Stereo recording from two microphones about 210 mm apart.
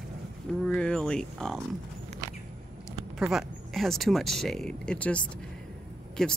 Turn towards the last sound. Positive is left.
turn(degrees=0)  # may be behind; listen again after turning